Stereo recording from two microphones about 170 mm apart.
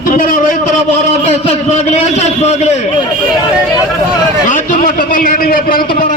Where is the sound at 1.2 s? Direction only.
40° left (ahead or behind).